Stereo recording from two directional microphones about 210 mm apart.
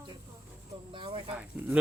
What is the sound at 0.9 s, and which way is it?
Speech, 25° right (ahead or behind).